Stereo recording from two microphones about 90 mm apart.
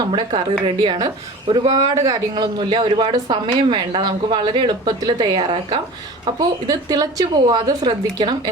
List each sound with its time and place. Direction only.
0.1 s a woman's voice: 65° right (ahead or behind)
6.7 s a woman's voice: 45° right (ahead or behind)